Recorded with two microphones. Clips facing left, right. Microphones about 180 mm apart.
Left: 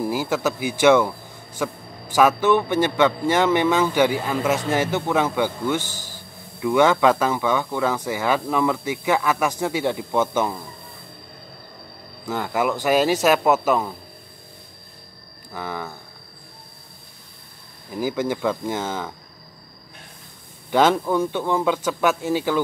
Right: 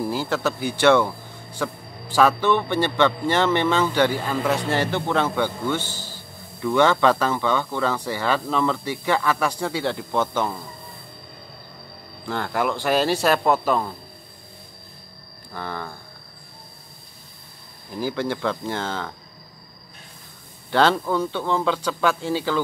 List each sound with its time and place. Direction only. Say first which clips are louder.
0.0 s speech: left 1 dB; 10° left (ahead or behind)
5.8 s speech: left 1 dB; 45° left (ahead or behind)
6.1 s speech: even; 10° left (ahead or behind)
12.3 s speech: left 1 dB; 5° left (ahead or behind)
15.5 s speech: left 1 dB; 10° left (ahead or behind)
17.9 s speech: left 2 dB; 15° left (ahead or behind)
20.7 s speech: left 2 dB; 15° left (ahead or behind)